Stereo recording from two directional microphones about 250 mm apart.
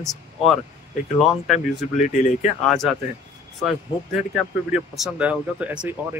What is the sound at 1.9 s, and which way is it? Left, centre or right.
Speech, left.